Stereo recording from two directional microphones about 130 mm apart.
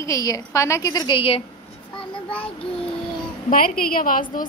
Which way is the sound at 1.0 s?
45° left (ahead or behind).